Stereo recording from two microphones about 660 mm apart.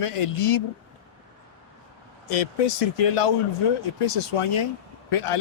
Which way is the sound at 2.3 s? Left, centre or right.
Left.